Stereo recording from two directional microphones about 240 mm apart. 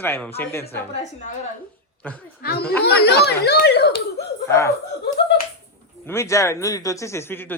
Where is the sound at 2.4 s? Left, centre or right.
Left.